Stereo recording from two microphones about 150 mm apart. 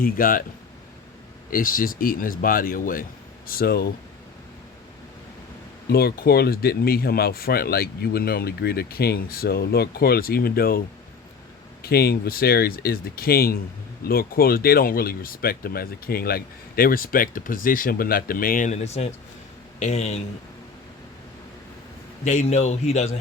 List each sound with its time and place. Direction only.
0.0 s speech: 70° left (ahead or behind)
1.5 s speech: 70° left (ahead or behind); by 3.8 s 90° left
5.9 s a man's voice: 90° left; by 20.2 s 50° left (ahead or behind)
22.2 s a man's voice: 50° left (ahead or behind)